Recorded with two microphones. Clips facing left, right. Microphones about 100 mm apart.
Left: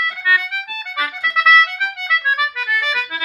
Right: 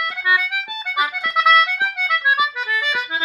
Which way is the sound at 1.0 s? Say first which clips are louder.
Right 1 dB; 20° right (ahead or behind).